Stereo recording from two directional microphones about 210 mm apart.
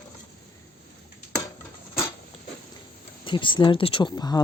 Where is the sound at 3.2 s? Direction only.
25° left (ahead or behind).